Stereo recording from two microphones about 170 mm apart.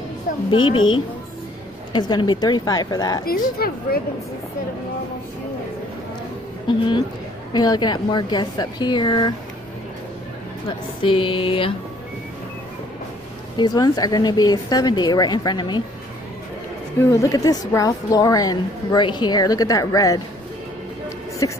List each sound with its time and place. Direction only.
0.5 s a woman's voice: 30° left (ahead or behind)
3.3 s a woman's voice: 60° left (ahead or behind)
6.7 s a woman's voice: 25° left (ahead or behind)
11.0 s a woman's voice: 30° left (ahead or behind)
13.6 s a woman's voice: 25° left (ahead or behind)
17.0 s a woman's voice: 20° left (ahead or behind)
21.4 s a woman's voice: 20° left (ahead or behind)